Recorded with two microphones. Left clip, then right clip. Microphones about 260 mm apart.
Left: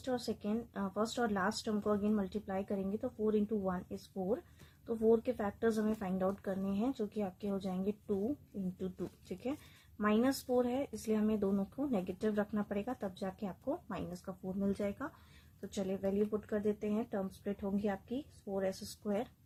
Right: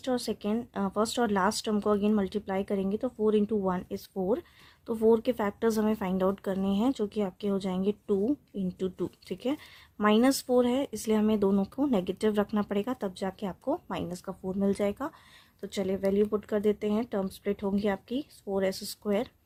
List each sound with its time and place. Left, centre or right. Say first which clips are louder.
0.0 s speech: right 7 dB; right